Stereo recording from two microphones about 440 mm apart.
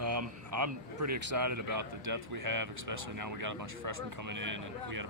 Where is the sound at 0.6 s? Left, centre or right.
Right.